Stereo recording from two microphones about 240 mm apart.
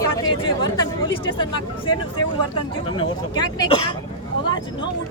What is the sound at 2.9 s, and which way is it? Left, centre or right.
Speech, centre.